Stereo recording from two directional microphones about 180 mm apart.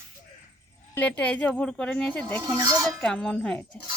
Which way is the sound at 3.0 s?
5° left (ahead or behind).